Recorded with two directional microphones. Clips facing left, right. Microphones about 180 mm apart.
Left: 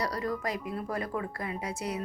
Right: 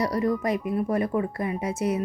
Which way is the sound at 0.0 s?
20° right (ahead or behind).